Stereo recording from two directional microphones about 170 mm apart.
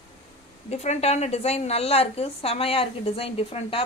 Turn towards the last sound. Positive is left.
turn(degrees=35)  # may be behind; listen again after turning